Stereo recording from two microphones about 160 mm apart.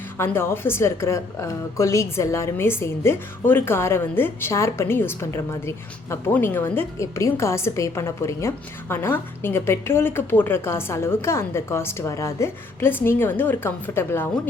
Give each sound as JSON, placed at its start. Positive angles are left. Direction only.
{"t": 0.2, "sound": "a woman's voice", "side_deg": 15}